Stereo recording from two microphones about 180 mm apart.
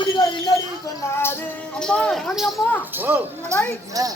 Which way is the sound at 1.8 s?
5° left (ahead or behind).